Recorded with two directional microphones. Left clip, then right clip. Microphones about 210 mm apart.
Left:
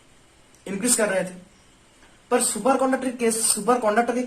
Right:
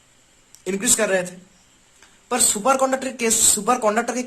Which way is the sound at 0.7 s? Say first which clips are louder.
Right 3 dB; 50° right (ahead or behind).